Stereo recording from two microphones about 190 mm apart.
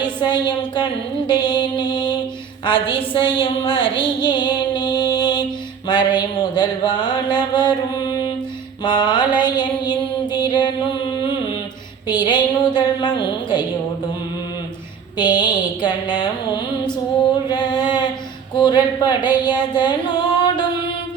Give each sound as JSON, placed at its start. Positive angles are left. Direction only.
{"t": 0.0, "sound": "a woman's voice", "side_deg": 25}
{"t": 1.3, "sound": "mantra", "side_deg": 25}
{"t": 2.6, "sound": "a woman's voice", "side_deg": 25}
{"t": 5.9, "sound": "mantra", "side_deg": 25}
{"t": 8.8, "sound": "a woman's voice", "side_deg": 25}
{"t": 10.3, "sound": "music", "side_deg": 25}
{"t": 12.0, "sound": "a woman's voice", "side_deg": 25}
{"t": 15.2, "sound": "a woman's voice", "side_deg": 25}
{"t": 17.5, "sound": "a sound", "side_deg": 25}
{"t": 18.5, "sound": "a woman's voice", "side_deg": 25}